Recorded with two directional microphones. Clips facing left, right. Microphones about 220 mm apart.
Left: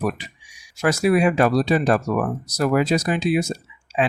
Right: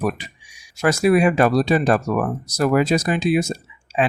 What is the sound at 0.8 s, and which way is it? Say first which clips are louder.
Speech: right 2 dB; 50° right (ahead or behind).